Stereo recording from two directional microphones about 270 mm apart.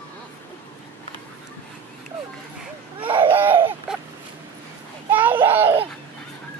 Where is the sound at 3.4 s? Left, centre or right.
Centre.